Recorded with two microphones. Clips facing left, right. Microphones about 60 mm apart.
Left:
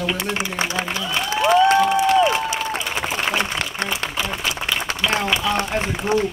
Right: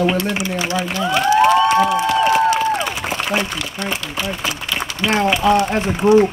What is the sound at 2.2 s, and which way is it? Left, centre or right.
Crowd, right.